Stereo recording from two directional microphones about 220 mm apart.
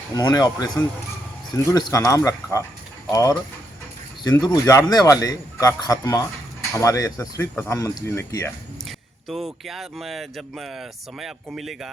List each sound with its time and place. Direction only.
0.1 s a man's voice: 15° left (ahead or behind)
9.3 s speech: centre (ahead or behind)